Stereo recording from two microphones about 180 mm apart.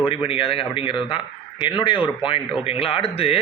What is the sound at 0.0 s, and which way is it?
A man's voice, 30° left (ahead or behind).